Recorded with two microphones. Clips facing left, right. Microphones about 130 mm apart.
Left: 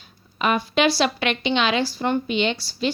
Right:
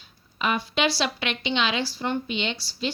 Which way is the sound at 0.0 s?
55° left (ahead or behind).